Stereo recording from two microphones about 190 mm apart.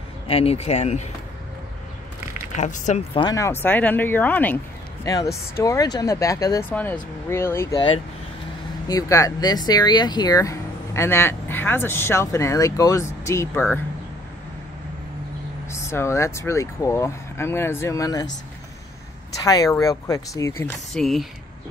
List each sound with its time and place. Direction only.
0.3 s speech: 30° left (ahead or behind)
2.5 s speech: 40° left (ahead or behind)
3.2 s speech: 20° left (ahead or behind)
8.8 s speech: 20° left (ahead or behind)
15.7 s speech: 15° left (ahead or behind)
19.3 s speech: 20° left (ahead or behind)
20.9 s speech: centre (ahead or behind)